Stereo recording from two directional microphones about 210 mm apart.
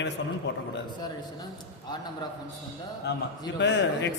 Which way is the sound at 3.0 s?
55° left (ahead or behind).